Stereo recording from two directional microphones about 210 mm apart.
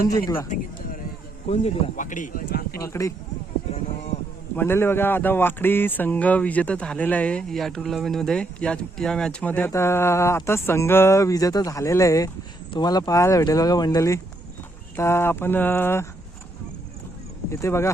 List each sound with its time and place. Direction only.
0.4 s speech: 40° left (ahead or behind)
2.8 s speech: 15° left (ahead or behind)
4.5 s speech: 10° left (ahead or behind)
17.5 s speech: 10° left (ahead or behind)